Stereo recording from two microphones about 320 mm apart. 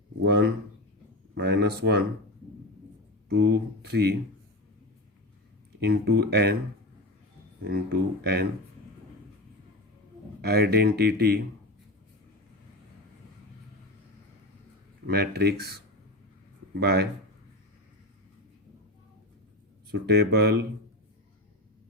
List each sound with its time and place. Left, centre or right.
0.3 s speech: right
3.2 s speech: right
5.8 s speech: right
7.6 s speech: right
10.4 s speech: right
15.0 s speech: right
19.9 s speech: right